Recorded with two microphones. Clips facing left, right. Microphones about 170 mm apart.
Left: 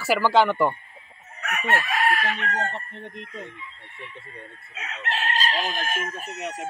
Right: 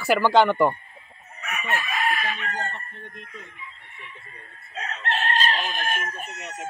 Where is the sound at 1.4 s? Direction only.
70° left (ahead or behind).